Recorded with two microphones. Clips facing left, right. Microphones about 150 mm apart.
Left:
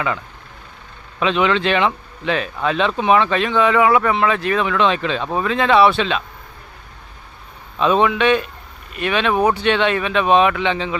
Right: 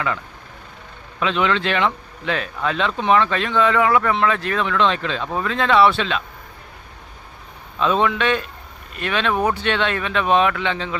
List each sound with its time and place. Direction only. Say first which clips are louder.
1.2 s speech: left 3 dB; 20° left (ahead or behind)
7.8 s speech: left 3 dB; 15° left (ahead or behind)